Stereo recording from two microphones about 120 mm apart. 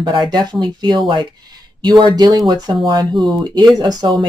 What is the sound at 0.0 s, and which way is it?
Speech, 40° right (ahead or behind).